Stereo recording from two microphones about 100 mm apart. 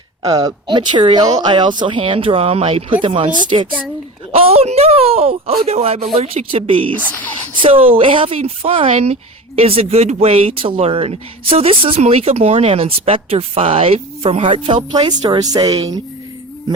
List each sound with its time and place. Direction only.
0.2 s speech: 35° right (ahead or behind); by 2.8 s 85° right
3.3 s speech: 55° right (ahead or behind)
4.3 s speech: 85° right
5.6 s speech: 90° right
6.1 s speech: 80° right
6.9 s speech: 15° left (ahead or behind)
7.6 s speech: 70° right (ahead or behind)
14.9 s speech: 45° right (ahead or behind)